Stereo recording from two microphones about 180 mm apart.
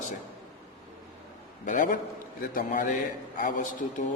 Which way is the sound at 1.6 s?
45° left (ahead or behind).